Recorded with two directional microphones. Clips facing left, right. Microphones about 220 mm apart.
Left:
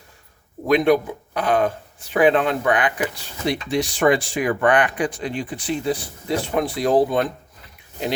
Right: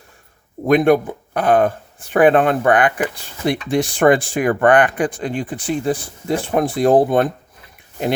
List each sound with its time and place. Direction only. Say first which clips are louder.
0.7 s speech: right 3 dB; 50° right (ahead or behind)